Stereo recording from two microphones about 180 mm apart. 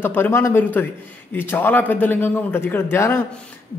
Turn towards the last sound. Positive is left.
turn(degrees=15)  # may be behind; listen again after turning